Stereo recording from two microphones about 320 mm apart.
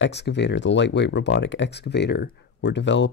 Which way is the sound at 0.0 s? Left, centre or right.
Left.